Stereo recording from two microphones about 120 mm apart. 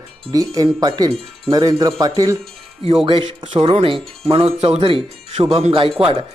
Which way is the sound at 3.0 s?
45° right (ahead or behind).